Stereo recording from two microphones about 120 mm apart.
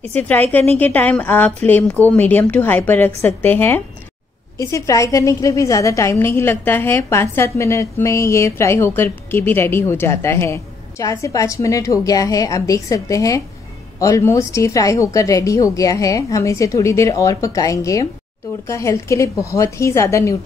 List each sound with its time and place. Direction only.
0.1 s a woman's voice: 15° left (ahead or behind)